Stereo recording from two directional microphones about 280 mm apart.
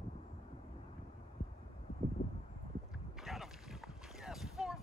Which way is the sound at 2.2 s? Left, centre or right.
Left.